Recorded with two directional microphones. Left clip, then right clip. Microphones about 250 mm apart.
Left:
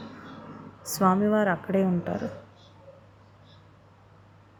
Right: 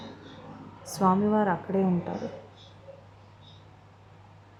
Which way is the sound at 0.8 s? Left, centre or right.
Centre.